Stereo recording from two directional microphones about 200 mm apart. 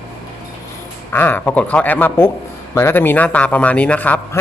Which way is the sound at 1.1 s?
10° left (ahead or behind).